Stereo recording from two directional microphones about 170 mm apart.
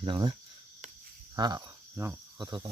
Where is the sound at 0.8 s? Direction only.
45° right (ahead or behind).